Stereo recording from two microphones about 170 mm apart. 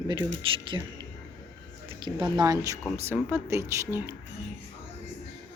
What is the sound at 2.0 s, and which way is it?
Speech, 25° right (ahead or behind).